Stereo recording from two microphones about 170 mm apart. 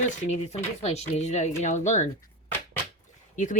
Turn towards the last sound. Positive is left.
turn(degrees=50)  # may be behind; listen again after turning